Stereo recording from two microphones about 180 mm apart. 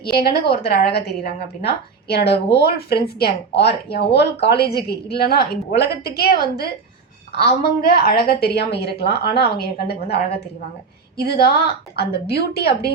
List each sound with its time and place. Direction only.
0.0 s a woman's voice: 60° left (ahead or behind)